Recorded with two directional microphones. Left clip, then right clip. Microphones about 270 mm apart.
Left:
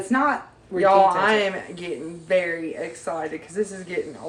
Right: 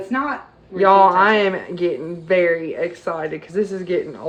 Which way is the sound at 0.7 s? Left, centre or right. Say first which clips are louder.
Right 4 dB; centre.